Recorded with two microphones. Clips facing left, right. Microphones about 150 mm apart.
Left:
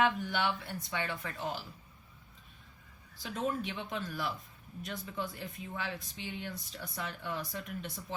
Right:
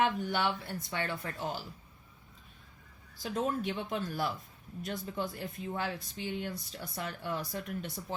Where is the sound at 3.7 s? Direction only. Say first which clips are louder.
Right 4 dB; 45° right (ahead or behind).